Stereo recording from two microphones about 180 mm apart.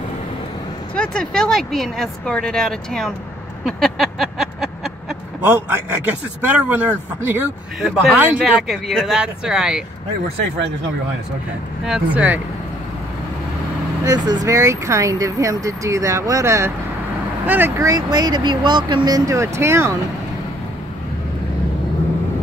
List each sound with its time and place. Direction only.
0.9 s speech: 5° left (ahead or behind)
3.6 s a sound: centre (ahead or behind)
5.4 s speech: 10° right (ahead or behind)
11.8 s speech: 5° right (ahead or behind)
14.0 s speech: 25° right (ahead or behind)